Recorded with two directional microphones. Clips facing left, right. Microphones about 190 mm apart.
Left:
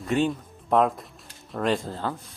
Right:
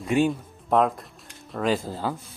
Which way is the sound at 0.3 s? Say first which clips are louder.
Even; centre (ahead or behind).